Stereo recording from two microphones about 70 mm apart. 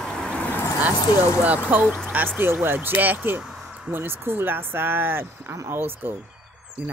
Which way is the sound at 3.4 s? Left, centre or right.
Centre.